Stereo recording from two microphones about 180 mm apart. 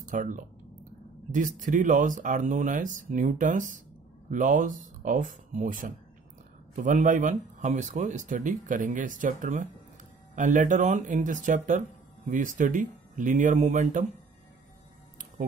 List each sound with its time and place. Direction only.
0.0 s speech: 45° right (ahead or behind)